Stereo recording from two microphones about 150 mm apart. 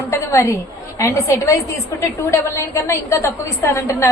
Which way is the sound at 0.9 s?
20° left (ahead or behind).